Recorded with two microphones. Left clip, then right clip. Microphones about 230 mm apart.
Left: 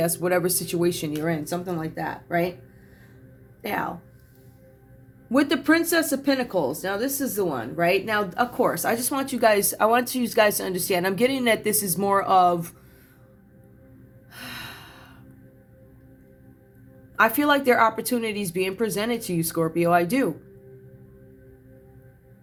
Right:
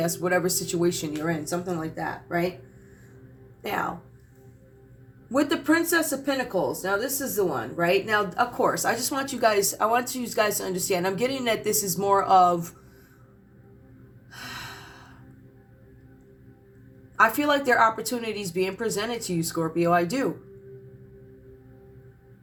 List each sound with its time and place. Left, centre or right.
0.2 s speech: left
5.3 s speech: left
14.3 s gasp: left
17.2 s speech: left